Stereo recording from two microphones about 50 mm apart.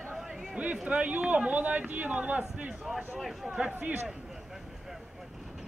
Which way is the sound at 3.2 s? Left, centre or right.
Centre.